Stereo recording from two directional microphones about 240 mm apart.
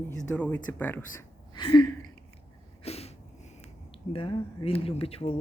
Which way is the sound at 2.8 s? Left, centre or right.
Left.